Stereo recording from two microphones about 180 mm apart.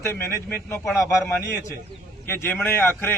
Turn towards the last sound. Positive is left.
turn(degrees=10)  # may be behind; listen again after turning